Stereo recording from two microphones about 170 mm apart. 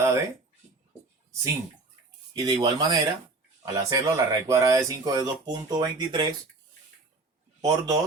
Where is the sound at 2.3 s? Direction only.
25° right (ahead or behind).